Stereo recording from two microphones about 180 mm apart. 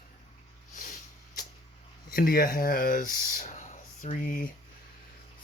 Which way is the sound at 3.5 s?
45° left (ahead or behind).